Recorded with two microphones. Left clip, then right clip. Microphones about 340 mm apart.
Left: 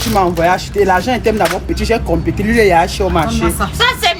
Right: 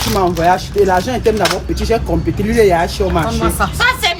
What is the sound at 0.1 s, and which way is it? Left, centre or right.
Speech, centre.